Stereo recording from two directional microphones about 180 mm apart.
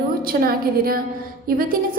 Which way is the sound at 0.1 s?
55° right (ahead or behind).